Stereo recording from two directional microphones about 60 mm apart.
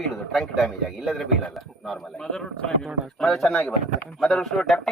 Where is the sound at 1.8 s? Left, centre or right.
Centre.